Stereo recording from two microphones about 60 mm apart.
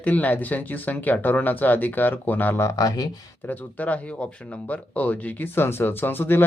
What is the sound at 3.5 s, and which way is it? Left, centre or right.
Speech, left.